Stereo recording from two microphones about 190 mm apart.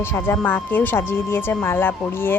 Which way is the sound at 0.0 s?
15° left (ahead or behind).